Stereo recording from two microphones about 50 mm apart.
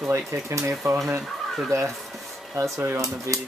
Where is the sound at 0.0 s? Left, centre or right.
Right.